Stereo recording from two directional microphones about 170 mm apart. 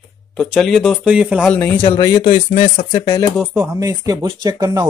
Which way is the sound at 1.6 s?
10° left (ahead or behind).